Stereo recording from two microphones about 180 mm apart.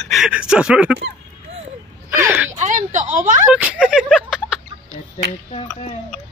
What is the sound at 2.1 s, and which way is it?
Gasp, 10° right (ahead or behind).